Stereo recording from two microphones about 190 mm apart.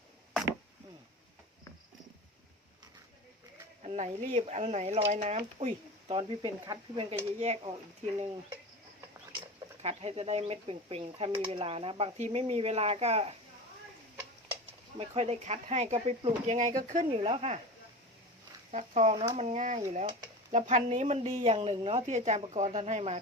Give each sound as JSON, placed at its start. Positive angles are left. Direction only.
{"t": 3.8, "sound": "speech", "side_deg": -35}
{"t": 9.8, "sound": "speech", "side_deg": -30}
{"t": 14.9, "sound": "speech", "side_deg": -35}
{"t": 17.1, "sound": "speech", "side_deg": -30}
{"t": 18.7, "sound": "speech", "side_deg": -40}